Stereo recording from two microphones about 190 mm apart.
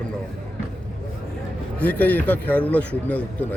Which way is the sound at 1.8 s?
10° left (ahead or behind).